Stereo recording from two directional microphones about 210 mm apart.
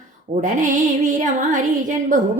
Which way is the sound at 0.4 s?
35° right (ahead or behind).